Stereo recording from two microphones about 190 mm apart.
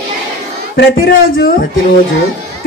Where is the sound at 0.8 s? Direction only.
55° left (ahead or behind).